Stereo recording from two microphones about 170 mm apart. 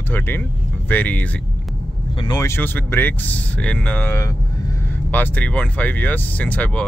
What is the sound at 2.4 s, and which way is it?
Speech, 15° left (ahead or behind).